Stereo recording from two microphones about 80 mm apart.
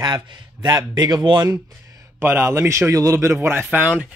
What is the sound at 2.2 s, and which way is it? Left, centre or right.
A man's voice, right.